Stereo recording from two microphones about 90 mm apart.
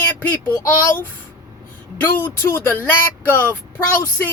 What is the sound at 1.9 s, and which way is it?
Speech, 20° left (ahead or behind).